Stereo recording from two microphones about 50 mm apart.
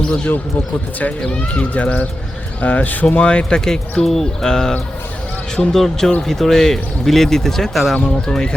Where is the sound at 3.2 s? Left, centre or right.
Left; by 7.9 s centre.